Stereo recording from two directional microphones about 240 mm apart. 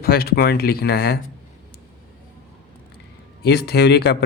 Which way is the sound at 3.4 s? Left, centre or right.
Left.